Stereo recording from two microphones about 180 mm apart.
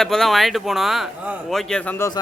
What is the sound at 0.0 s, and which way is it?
A man's voice, centre (ahead or behind).